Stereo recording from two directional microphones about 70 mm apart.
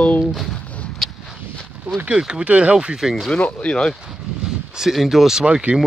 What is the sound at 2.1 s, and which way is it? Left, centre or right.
Speech, centre.